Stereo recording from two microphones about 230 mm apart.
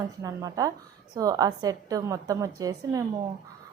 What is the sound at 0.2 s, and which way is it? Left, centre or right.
A woman's voice, centre.